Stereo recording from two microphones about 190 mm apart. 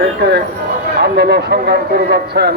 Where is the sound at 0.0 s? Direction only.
60° right (ahead or behind).